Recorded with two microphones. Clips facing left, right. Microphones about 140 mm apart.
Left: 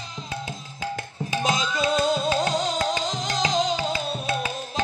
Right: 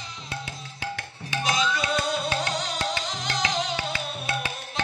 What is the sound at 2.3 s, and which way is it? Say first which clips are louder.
Music: left 5 dB; 25° left (ahead or behind).